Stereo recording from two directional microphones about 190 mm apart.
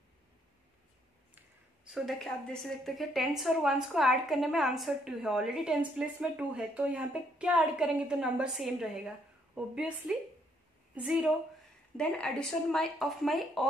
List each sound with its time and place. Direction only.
1.9 s a woman's voice: centre (ahead or behind)